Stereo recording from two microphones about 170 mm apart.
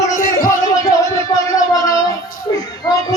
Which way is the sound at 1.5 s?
20° left (ahead or behind).